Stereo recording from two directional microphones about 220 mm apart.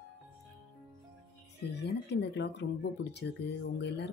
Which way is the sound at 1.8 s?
50° left (ahead or behind).